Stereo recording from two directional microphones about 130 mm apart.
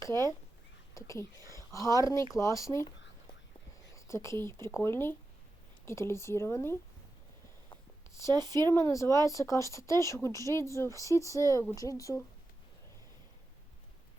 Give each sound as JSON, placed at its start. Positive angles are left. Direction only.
{"t": 0.1, "sound": "a woman's voice", "side_deg": 20}
{"t": 3.8, "sound": "a sound", "side_deg": 20}
{"t": 4.6, "sound": "speech", "side_deg": 20}
{"t": 7.7, "sound": "a sound", "side_deg": 20}
{"t": 8.3, "sound": "speech", "side_deg": -35}
{"t": 8.7, "sound": "speech", "side_deg": 25}